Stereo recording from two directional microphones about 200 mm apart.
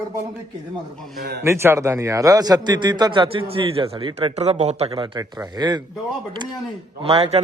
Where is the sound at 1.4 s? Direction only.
15° right (ahead or behind).